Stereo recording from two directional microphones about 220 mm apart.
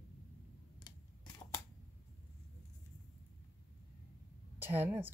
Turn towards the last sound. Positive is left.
turn(degrees=-10)  # may be behind; listen again after turning